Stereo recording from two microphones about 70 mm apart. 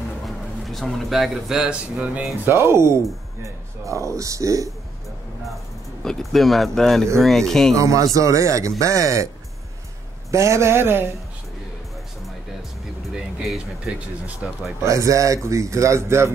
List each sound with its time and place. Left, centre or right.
0.2 s speech: centre
2.4 s a man's voice: right
6.0 s speech: centre
7.7 s speech: right
10.3 s a man's voice: right
13.1 s a sound: centre
13.8 s speech: centre
14.8 s speech: right